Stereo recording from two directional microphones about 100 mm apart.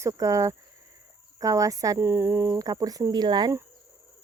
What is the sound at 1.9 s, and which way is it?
Speech, 25° right (ahead or behind).